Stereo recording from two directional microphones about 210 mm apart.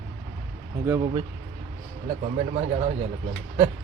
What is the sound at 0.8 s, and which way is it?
Speech, 15° right (ahead or behind).